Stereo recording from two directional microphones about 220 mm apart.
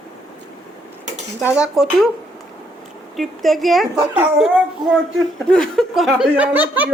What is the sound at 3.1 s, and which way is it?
Speech, centre (ahead or behind).